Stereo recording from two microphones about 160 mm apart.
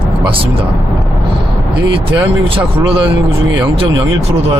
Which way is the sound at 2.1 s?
35° right (ahead or behind).